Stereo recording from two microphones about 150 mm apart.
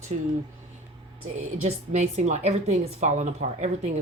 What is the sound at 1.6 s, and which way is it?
A woman's voice, 45° right (ahead or behind).